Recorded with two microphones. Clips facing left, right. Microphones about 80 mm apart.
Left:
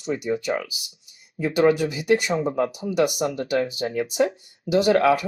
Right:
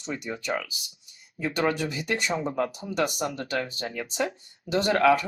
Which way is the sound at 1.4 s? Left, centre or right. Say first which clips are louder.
Left 7 dB; centre.